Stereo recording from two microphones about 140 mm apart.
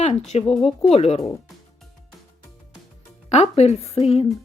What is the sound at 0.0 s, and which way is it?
Speech, 50° left (ahead or behind).